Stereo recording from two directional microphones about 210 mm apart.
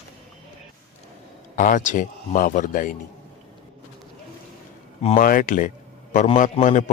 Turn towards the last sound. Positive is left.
turn(degrees=35)  # may be behind; listen again after turning